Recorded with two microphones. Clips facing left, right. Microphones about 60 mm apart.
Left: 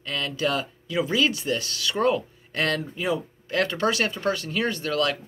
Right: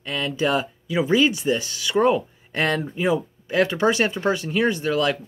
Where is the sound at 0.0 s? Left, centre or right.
Centre.